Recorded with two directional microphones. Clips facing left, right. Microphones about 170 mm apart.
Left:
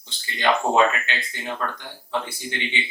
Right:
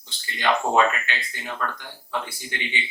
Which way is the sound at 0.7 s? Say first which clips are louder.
Left 1 dB; 20° left (ahead or behind).